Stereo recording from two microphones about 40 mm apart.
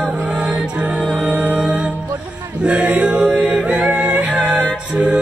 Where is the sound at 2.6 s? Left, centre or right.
Right.